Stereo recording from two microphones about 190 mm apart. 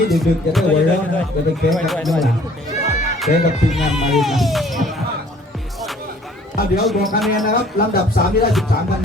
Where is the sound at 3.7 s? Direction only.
Centre (ahead or behind).